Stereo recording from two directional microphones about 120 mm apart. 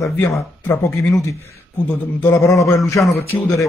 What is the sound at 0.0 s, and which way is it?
Speech, 25° left (ahead or behind).